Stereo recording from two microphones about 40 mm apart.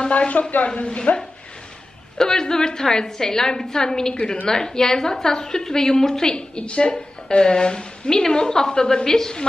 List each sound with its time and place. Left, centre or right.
0.1 s a woman's voice: left
0.7 s a woman's voice: left
2.1 s a woman's voice: centre